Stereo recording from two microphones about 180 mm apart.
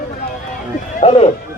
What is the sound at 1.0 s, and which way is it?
Speech, 35° left (ahead or behind).